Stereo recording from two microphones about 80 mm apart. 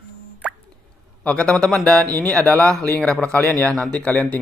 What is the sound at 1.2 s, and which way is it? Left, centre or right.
Speech, centre.